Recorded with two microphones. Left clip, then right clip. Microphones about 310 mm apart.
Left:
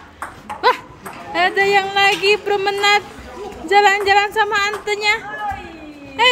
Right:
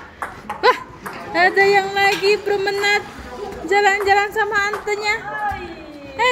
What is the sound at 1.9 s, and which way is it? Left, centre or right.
Speech, left.